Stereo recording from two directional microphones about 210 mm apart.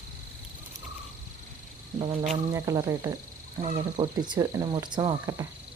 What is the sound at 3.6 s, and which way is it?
Speech, 35° right (ahead or behind).